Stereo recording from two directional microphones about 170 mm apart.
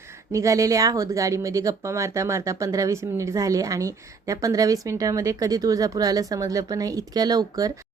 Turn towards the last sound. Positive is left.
turn(degrees=-20)  # may be behind; listen again after turning